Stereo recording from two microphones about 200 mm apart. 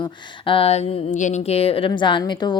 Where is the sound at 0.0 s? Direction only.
25° left (ahead or behind).